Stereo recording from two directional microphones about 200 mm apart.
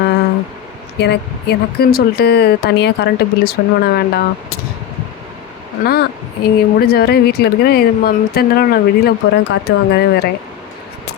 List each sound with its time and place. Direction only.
0.9 s a woman's voice: 55° left (ahead or behind)
5.8 s a woman's voice: 50° left (ahead or behind)